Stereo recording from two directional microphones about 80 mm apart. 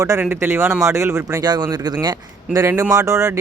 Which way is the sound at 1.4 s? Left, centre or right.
Right.